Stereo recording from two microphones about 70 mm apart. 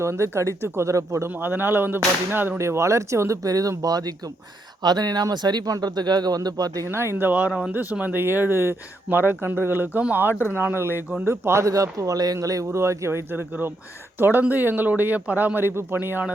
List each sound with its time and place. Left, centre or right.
0.0 s speech: right
1.3 s speech: right
2.6 s speech: right
5.7 s speech: right
6.9 s speech: right
11.6 s speech: right